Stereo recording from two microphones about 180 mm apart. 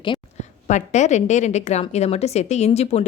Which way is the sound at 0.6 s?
40° left (ahead or behind).